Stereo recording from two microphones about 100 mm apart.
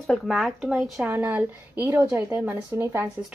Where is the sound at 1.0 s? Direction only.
20° right (ahead or behind).